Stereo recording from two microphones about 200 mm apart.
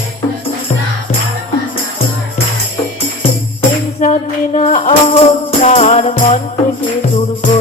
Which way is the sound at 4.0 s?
35° left (ahead or behind).